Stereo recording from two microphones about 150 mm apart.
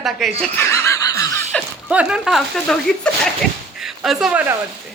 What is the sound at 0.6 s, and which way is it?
Laughter, 20° left (ahead or behind).